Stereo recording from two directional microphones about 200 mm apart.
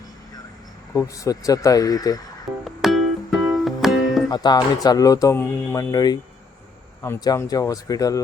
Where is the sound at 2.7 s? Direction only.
Centre (ahead or behind).